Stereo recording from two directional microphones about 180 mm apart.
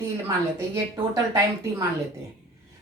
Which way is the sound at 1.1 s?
20° right (ahead or behind).